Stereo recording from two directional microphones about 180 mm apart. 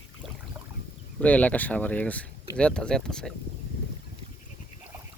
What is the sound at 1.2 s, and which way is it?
Speech, 5° left (ahead or behind).